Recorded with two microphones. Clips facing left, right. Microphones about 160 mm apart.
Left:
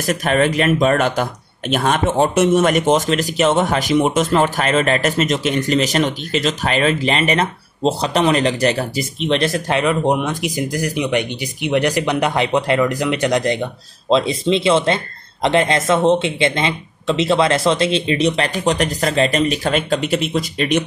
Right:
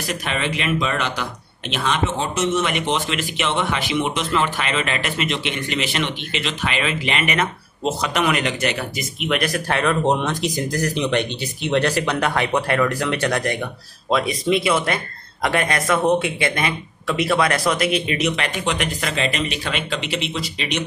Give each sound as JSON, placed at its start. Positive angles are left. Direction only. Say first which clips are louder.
{"t": 0.0, "sound": "speech", "louder": "left 8 dB", "side_deg": 45}